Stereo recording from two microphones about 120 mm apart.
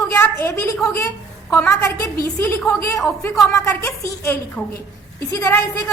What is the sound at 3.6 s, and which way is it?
Speech, 20° left (ahead or behind).